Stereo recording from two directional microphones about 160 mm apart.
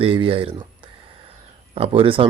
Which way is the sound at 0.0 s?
35° right (ahead or behind).